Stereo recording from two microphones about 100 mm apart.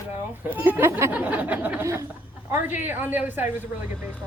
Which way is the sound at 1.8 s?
30° right (ahead or behind).